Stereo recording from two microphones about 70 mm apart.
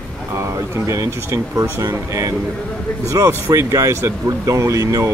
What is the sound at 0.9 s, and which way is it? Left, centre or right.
Speech, right.